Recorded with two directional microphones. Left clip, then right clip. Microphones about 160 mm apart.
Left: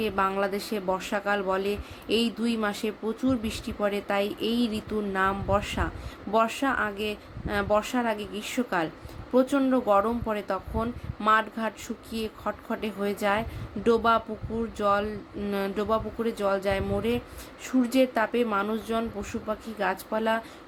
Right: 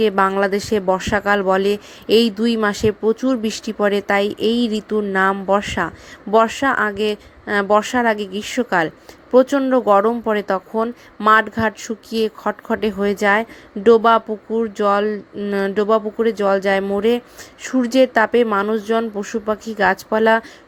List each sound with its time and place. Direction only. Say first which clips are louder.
0.0 s speech: right 10 dB; 50° right (ahead or behind)